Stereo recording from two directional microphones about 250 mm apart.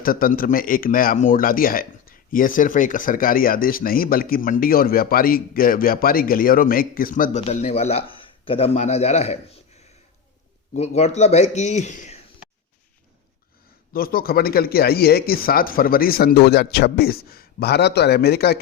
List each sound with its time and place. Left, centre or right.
0.0 s a man's voice: left
10.8 s a man's voice: left
13.9 s a man's voice: left